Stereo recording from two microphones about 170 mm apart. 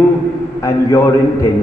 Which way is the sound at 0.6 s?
15° left (ahead or behind).